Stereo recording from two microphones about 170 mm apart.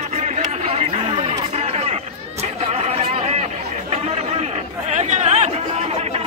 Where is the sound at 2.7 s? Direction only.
40° right (ahead or behind).